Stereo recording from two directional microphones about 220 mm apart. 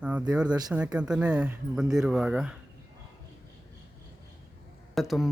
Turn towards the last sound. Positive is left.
turn(degrees=0)  # may be behind; listen again after turning